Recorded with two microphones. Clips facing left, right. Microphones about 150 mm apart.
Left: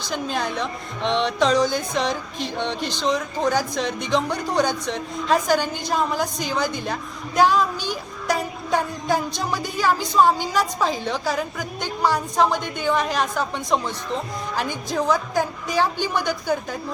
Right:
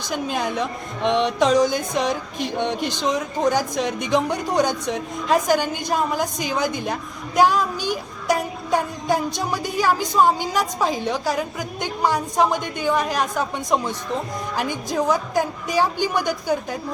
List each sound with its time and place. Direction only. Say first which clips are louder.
0.1 s speech: right 1 dB; 10° right (ahead or behind)